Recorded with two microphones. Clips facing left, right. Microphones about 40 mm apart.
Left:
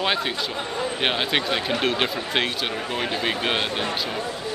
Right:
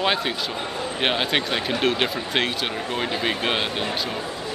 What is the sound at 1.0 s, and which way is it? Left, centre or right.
Speech, centre.